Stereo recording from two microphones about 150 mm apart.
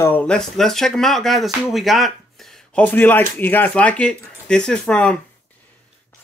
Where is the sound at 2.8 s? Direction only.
10° left (ahead or behind).